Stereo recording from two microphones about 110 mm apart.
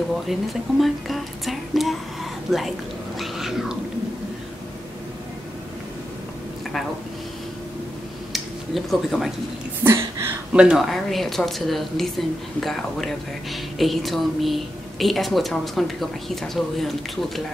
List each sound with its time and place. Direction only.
0.3 s speech: centre (ahead or behind)
3.2 s cat: 5° right (ahead or behind)
8.3 s a sound: centre (ahead or behind)
9.8 s speech: 20° right (ahead or behind)
10.5 s speech: 10° right (ahead or behind)